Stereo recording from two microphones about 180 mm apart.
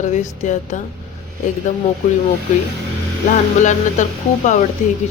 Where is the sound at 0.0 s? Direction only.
40° left (ahead or behind).